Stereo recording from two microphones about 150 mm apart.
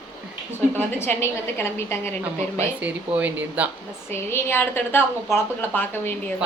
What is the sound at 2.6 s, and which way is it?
Speech, 10° right (ahead or behind).